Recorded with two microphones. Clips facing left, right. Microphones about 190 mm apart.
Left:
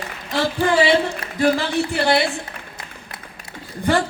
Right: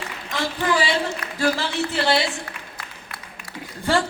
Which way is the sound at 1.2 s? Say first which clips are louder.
Left 4 dB; 15° left (ahead or behind).